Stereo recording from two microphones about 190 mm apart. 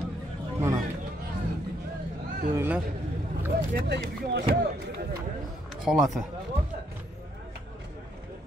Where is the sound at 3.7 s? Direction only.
60° right (ahead or behind).